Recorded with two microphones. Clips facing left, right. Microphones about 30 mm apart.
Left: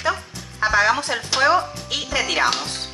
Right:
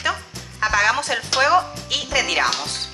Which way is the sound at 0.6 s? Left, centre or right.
Right.